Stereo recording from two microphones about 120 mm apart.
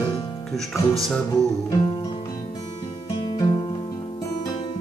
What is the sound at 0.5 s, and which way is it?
Speech, centre (ahead or behind).